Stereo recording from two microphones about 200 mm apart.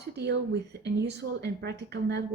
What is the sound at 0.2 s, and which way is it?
A woman's voice, 60° right (ahead or behind).